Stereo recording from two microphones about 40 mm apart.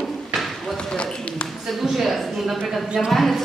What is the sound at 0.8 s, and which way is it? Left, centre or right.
Speech, centre.